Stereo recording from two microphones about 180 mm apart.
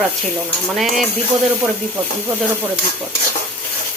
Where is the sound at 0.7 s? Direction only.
Centre (ahead or behind).